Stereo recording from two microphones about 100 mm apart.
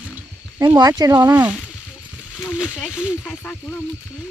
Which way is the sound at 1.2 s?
15° right (ahead or behind).